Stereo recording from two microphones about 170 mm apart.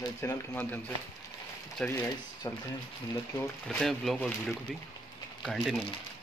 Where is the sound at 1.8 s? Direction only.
20° left (ahead or behind).